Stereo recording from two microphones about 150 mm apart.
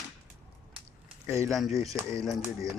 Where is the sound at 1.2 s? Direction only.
20° right (ahead or behind).